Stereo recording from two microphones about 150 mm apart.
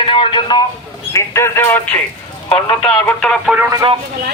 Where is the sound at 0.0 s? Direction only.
35° left (ahead or behind).